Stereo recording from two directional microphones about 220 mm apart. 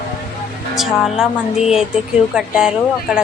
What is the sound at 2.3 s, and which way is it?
Speech, 5° right (ahead or behind).